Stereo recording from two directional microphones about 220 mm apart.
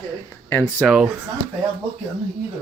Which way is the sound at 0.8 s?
5° right (ahead or behind).